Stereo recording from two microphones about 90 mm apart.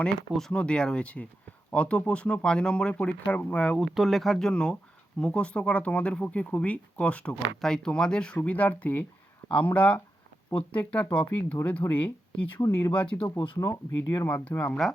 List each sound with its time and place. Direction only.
0.0 s speech: 10° left (ahead or behind)
3.9 s speech: centre (ahead or behind); by 12.5 s 15° left (ahead or behind)
12.5 s speech: 35° left (ahead or behind)
12.9 s speech: 15° left (ahead or behind)
13.6 s speech: 40° left (ahead or behind)
14.3 s speech: 25° left (ahead or behind)
14.8 s speech: 5° left (ahead or behind)